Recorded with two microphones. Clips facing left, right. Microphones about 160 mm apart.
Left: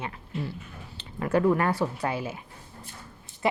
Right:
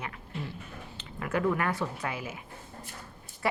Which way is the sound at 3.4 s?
20° left (ahead or behind).